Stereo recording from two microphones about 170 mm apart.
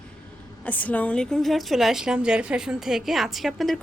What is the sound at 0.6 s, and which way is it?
A woman's voice, 10° left (ahead or behind).